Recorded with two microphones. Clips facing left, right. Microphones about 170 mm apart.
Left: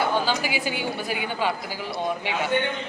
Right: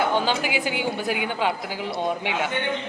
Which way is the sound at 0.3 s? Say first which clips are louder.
Right 1 dB; 15° right (ahead or behind).